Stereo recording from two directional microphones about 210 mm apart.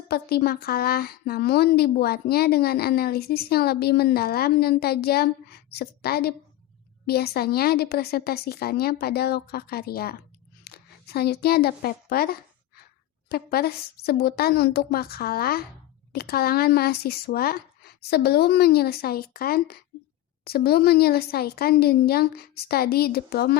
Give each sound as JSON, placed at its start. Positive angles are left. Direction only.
{"t": 0.1, "sound": "a woman's voice", "side_deg": 50}